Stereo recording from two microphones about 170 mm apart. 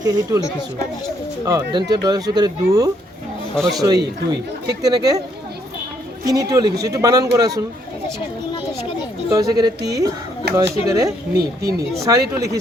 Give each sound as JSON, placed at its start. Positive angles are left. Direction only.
{"t": 0.0, "sound": "speech", "side_deg": -25}
{"t": 1.5, "sound": "speech", "side_deg": -20}
{"t": 6.2, "sound": "speech", "side_deg": -20}
{"t": 9.3, "sound": "speech", "side_deg": -20}
{"t": 10.4, "sound": "speech", "side_deg": -80}
{"t": 10.8, "sound": "speech", "side_deg": -20}